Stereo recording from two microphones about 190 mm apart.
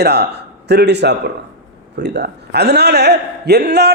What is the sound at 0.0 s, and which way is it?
A man's voice, 60° right (ahead or behind).